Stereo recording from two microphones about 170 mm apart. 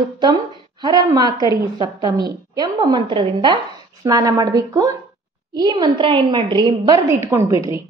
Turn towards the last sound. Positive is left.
turn(degrees=-20)  # may be behind; listen again after turning